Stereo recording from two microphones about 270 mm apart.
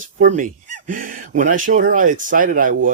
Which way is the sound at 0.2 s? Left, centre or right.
Right.